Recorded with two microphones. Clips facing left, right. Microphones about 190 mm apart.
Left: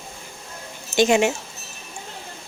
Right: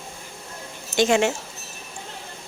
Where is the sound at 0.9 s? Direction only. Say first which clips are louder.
Left 2 dB; 20° left (ahead or behind).